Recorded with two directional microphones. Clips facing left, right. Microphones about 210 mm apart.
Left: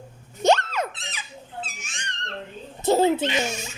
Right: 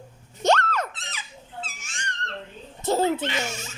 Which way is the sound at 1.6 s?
15° left (ahead or behind).